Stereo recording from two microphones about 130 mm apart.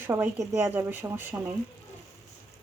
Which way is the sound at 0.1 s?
15° right (ahead or behind).